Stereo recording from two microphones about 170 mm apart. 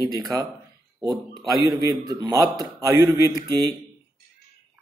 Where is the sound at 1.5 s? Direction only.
20° right (ahead or behind).